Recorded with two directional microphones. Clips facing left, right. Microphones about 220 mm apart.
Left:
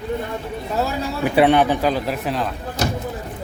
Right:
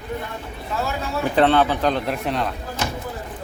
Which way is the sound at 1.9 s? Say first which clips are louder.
Left 1 dB; 5° left (ahead or behind).